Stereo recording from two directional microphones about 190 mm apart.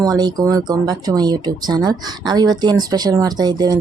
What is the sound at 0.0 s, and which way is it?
Speech, 20° right (ahead or behind).